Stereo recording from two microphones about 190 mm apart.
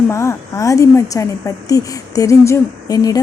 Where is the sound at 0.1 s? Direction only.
15° left (ahead or behind).